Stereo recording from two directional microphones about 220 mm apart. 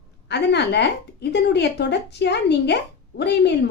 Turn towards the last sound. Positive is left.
turn(degrees=50)  # may be behind; listen again after turning